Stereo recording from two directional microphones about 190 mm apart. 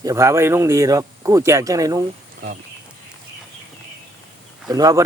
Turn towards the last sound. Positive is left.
turn(degrees=-20)  # may be behind; listen again after turning